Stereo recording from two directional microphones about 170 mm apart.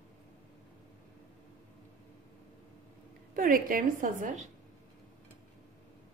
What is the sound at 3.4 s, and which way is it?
A woman's voice, 55° right (ahead or behind).